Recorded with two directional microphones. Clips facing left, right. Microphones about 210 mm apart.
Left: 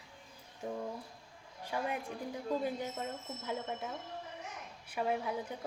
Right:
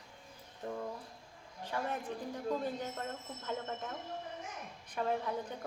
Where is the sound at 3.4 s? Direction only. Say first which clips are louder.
Even; 5° left (ahead or behind).